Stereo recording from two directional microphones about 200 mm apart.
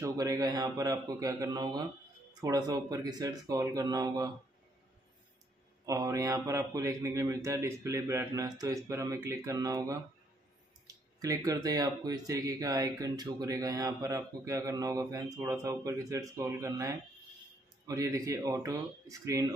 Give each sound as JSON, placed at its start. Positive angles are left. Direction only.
{"t": 0.0, "sound": "speech", "side_deg": -15}
{"t": 5.9, "sound": "speech", "side_deg": -15}